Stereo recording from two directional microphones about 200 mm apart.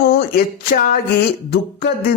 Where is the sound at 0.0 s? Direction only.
45° left (ahead or behind).